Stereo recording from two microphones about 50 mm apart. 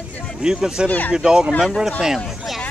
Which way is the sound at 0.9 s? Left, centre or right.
Left.